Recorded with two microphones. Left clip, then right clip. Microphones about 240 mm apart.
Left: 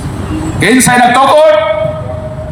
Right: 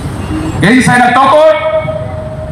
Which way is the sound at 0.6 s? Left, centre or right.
Left.